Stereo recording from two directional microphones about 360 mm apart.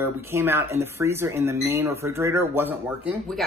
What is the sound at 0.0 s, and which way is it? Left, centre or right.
A woman's voice, centre.